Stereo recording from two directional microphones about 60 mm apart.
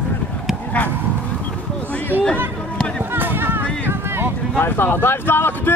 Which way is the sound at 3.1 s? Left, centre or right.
Right.